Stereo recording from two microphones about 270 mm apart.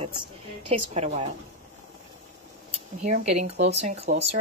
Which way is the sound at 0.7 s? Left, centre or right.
Right.